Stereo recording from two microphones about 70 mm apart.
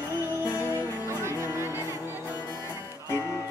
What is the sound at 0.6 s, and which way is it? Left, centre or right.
Music, left.